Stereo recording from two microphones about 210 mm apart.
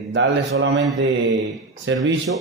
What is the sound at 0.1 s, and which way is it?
Speech, 65° right (ahead or behind).